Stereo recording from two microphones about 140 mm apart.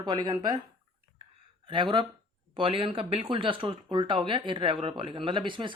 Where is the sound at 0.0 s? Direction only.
30° right (ahead or behind).